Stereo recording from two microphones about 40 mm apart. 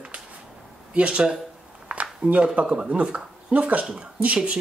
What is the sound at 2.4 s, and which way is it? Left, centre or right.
Speech, right.